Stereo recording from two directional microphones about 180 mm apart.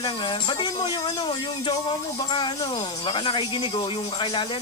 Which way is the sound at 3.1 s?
30° left (ahead or behind).